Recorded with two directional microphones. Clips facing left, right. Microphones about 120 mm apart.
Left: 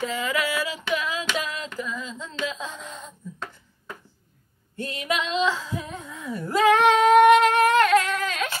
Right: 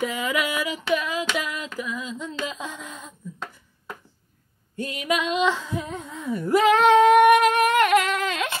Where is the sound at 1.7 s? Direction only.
15° right (ahead or behind).